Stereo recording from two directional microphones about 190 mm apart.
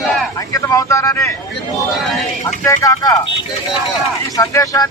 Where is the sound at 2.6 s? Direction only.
15° left (ahead or behind).